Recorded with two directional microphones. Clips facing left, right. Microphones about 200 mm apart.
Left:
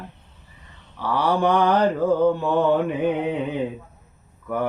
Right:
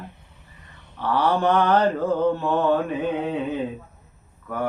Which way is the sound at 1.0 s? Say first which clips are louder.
Even; 15° left (ahead or behind).